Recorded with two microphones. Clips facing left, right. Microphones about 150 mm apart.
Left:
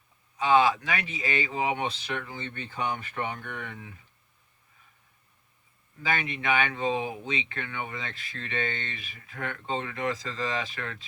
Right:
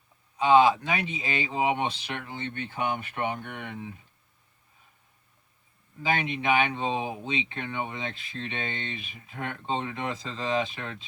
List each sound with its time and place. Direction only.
0.4 s speech: 30° right (ahead or behind)
1.5 s speech: 15° right (ahead or behind)
6.1 s speech: 20° right (ahead or behind)